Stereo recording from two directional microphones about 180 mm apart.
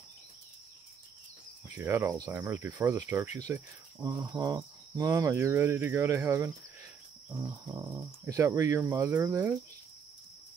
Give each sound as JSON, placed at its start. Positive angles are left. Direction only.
{"t": 1.8, "sound": "speech", "side_deg": -15}